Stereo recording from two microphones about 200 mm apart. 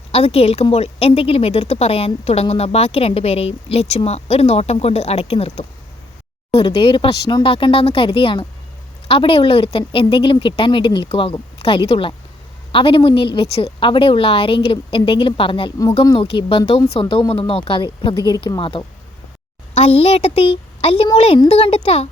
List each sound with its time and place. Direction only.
0.1 s a woman's voice: 30° left (ahead or behind)